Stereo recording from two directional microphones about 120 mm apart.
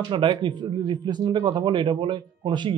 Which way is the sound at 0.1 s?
45° right (ahead or behind).